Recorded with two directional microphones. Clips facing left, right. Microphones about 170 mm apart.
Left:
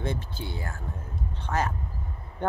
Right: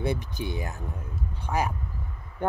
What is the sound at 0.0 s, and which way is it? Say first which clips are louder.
Speech: right 3 dB; 15° right (ahead or behind).